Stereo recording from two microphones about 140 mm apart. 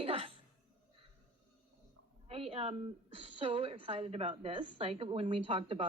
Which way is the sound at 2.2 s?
45° right (ahead or behind).